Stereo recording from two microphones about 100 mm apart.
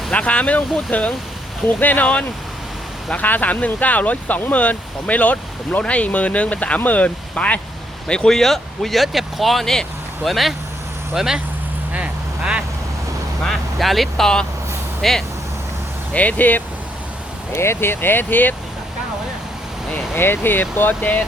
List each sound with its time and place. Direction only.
0.1 s speech: 10° left (ahead or behind); by 11.3 s 5° right (ahead or behind)
11.9 s vehicle: 10° right (ahead or behind)
13.5 s speech: centre (ahead or behind)
16.1 s speech: 15° left (ahead or behind)
20.1 s speech: 20° left (ahead or behind)